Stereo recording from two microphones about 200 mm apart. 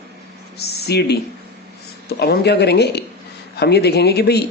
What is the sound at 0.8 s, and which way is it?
Speech, 55° left (ahead or behind).